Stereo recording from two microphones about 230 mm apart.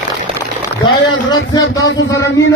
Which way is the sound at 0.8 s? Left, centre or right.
Centre.